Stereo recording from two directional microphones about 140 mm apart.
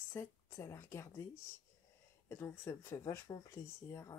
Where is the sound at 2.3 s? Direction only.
20° left (ahead or behind).